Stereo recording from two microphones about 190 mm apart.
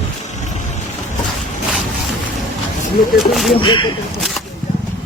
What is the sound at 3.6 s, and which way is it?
Speech, 25° left (ahead or behind).